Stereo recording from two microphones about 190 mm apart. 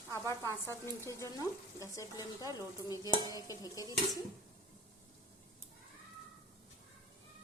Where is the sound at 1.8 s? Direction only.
15° left (ahead or behind).